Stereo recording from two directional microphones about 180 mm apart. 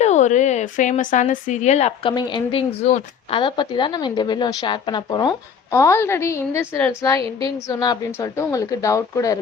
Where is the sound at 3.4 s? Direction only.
25° left (ahead or behind).